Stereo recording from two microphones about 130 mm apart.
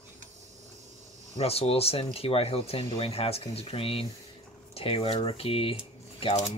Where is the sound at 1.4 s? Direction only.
50° left (ahead or behind).